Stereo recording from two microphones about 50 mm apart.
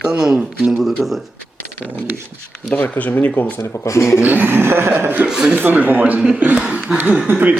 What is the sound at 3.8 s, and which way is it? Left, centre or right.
Speech, left.